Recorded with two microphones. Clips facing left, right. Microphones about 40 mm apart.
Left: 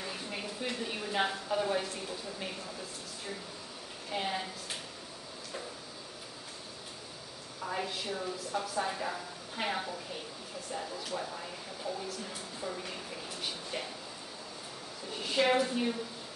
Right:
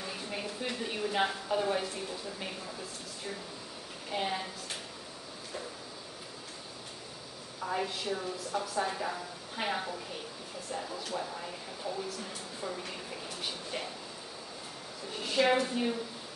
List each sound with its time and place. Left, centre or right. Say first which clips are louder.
0.0 s a woman's voice: right 1 dB; centre
4.1 s speech: right 1 dB; centre
7.6 s speech: right 2 dB; centre
15.0 s speech: right 1 dB; centre